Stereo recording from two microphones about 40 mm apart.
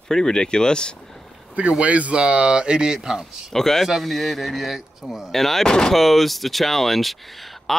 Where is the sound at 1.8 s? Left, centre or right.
Right; by 3.5 s centre.